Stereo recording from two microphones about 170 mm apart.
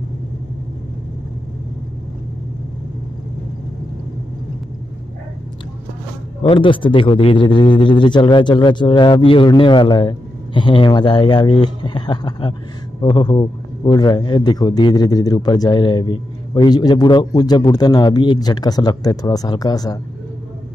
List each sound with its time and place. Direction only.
6.4 s a man's voice: 30° left (ahead or behind)